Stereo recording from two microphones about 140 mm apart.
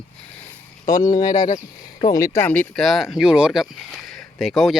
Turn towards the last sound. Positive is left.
turn(degrees=0)  # may be behind; listen again after turning